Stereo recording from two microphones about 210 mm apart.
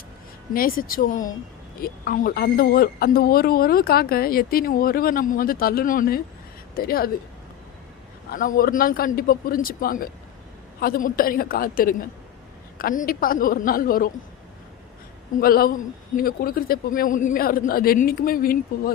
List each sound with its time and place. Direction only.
0.5 s speech: 45° left (ahead or behind)
8.3 s speech: 40° left (ahead or behind)
15.4 s speech: 45° left (ahead or behind)